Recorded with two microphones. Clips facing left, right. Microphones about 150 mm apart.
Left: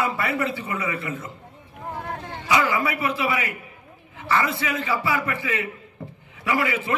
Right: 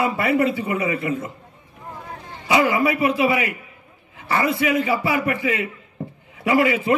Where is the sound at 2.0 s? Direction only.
65° left (ahead or behind).